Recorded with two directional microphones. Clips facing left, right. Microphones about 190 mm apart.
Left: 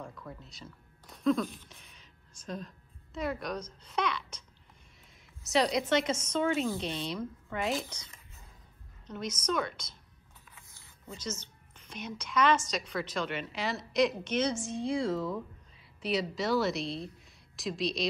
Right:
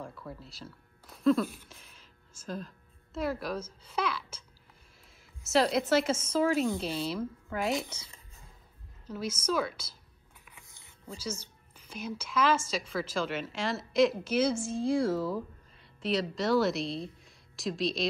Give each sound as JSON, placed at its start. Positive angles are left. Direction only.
{"t": 0.0, "sound": "speech", "side_deg": -5}
{"t": 1.7, "sound": "a sound", "side_deg": 0}
{"t": 3.2, "sound": "speech", "side_deg": -5}
{"t": 5.5, "sound": "a woman's voice", "side_deg": 0}
{"t": 10.5, "sound": "a sound", "side_deg": -20}
{"t": 11.2, "sound": "a woman's voice", "side_deg": -10}